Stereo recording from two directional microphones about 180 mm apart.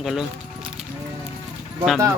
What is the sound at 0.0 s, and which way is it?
Speech, 5° right (ahead or behind).